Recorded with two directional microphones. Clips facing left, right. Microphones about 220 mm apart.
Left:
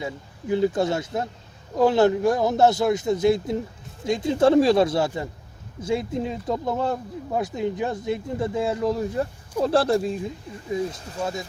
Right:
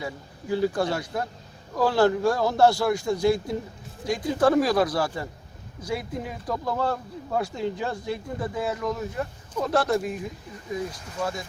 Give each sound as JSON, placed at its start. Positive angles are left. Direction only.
{"t": 0.0, "sound": "speech", "side_deg": 20}